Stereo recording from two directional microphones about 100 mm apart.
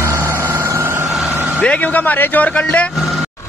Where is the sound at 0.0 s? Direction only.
25° right (ahead or behind).